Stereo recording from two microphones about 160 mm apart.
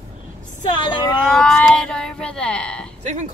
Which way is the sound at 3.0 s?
50° right (ahead or behind).